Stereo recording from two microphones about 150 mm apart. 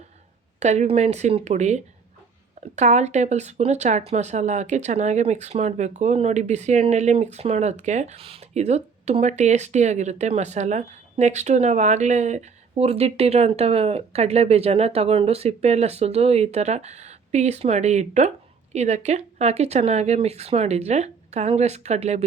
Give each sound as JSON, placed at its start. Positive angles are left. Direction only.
{"t": 0.6, "sound": "speech", "side_deg": -50}